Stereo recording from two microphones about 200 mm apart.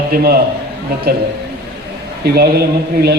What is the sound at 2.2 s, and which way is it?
Speech, 50° right (ahead or behind).